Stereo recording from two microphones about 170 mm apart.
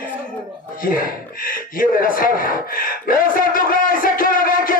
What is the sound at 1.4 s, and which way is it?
Gasp, 55° left (ahead or behind).